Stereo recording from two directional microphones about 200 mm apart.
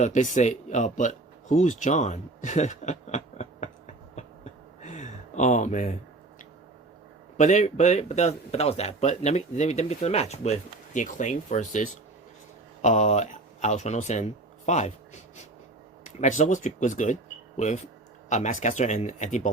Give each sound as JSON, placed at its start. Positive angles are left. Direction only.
{"t": 0.0, "sound": "speech", "side_deg": 40}
{"t": 4.8, "sound": "a sound", "side_deg": 35}
{"t": 7.3, "sound": "speech", "side_deg": 35}
{"t": 16.2, "sound": "speech", "side_deg": 40}
{"t": 18.3, "sound": "speech", "side_deg": 35}